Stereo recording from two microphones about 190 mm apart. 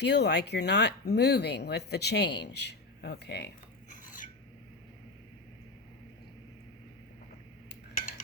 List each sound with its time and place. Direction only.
0.0 s speech: 60° left (ahead or behind)